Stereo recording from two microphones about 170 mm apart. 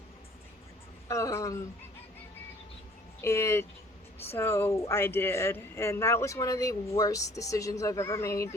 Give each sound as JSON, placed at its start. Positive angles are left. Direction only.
{"t": 1.0, "sound": "speech", "side_deg": 20}
{"t": 3.2, "sound": "speech", "side_deg": 15}